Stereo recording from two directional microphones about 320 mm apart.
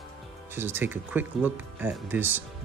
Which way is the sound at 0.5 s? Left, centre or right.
Centre.